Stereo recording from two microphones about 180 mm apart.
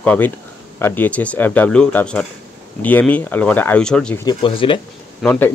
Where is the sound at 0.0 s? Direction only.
10° left (ahead or behind).